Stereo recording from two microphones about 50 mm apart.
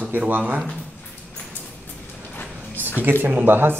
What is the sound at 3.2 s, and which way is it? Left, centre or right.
Speech, right.